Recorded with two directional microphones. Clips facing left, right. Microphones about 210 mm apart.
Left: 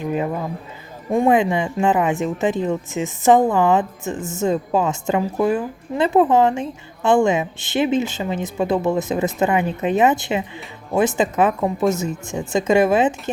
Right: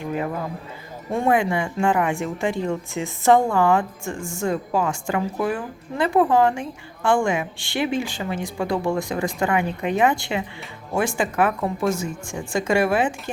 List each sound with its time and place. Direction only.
1.1 s a woman's voice: 20° left (ahead or behind)